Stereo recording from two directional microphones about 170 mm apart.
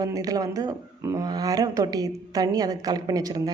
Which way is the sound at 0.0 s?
20° right (ahead or behind).